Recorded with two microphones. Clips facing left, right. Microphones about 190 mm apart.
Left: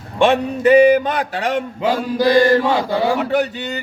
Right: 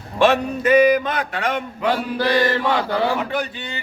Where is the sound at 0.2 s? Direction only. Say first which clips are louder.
Left 2 dB; 30° left (ahead or behind).